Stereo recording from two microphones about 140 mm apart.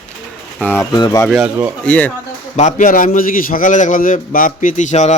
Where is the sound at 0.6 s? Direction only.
15° left (ahead or behind).